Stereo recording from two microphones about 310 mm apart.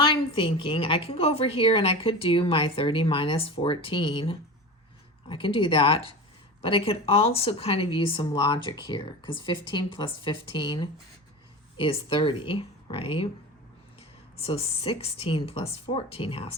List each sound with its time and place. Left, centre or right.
0.0 s a woman's voice: centre
14.3 s speech: centre